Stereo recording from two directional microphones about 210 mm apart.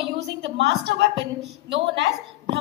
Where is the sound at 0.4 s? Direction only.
55° right (ahead or behind).